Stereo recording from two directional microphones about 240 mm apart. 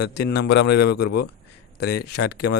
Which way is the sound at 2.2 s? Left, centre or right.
Left.